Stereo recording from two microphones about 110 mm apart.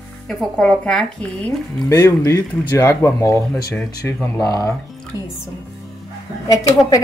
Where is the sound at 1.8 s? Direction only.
30° left (ahead or behind).